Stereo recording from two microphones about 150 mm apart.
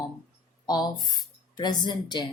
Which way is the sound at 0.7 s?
25° left (ahead or behind).